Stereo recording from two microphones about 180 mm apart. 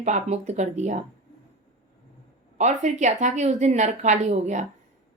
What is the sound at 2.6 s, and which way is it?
Speech, 40° right (ahead or behind).